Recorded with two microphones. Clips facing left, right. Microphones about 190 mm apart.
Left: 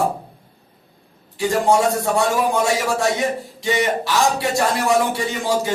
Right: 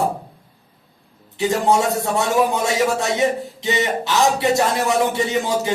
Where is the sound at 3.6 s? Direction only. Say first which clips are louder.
Left 2 dB; 20° right (ahead or behind).